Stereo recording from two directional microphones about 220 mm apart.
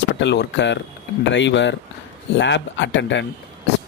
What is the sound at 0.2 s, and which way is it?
Speech, 55° left (ahead or behind).